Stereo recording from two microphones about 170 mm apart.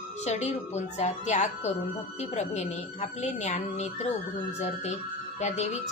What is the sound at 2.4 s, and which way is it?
Speech, 40° left (ahead or behind).